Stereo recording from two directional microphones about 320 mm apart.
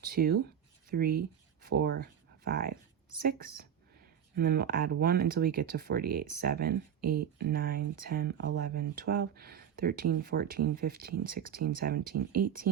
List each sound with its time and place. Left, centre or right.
0.1 s speech: right
11.9 s speech: right